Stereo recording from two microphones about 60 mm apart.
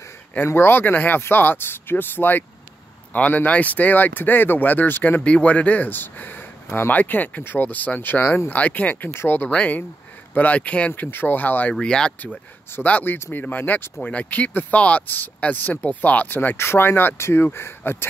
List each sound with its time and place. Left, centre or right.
0.5 s speech: left
5.2 s speech: left
9.1 s speech: left
9.5 s speech: left
11.0 s speech: left
11.8 s speech: centre
12.8 s speech: left